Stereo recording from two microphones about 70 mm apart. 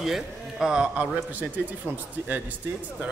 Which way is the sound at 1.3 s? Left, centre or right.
Right.